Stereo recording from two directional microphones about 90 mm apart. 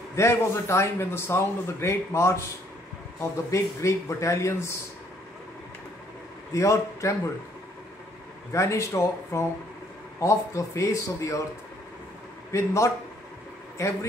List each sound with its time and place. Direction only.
0.1 s a man's voice: 30° left (ahead or behind)
6.5 s a man's voice: 35° left (ahead or behind)
8.5 s a man's voice: 35° left (ahead or behind)
12.5 s a man's voice: 35° left (ahead or behind)